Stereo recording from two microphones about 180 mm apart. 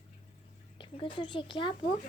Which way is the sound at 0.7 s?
30° left (ahead or behind).